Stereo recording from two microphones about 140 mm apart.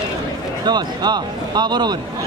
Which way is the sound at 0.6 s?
30° right (ahead or behind).